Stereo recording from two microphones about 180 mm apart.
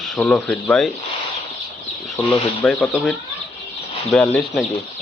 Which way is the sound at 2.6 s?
10° left (ahead or behind).